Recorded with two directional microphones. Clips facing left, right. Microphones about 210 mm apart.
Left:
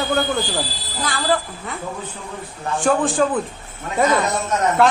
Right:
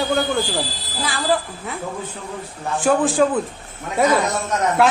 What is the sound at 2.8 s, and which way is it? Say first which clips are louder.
Speech: right 1 dB; centre (ahead or behind).